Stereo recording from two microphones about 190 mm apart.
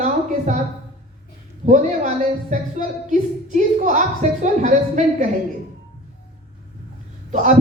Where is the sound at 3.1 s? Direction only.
40° right (ahead or behind).